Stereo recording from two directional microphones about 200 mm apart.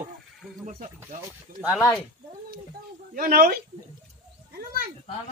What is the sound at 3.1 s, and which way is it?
Speech, 45° right (ahead or behind).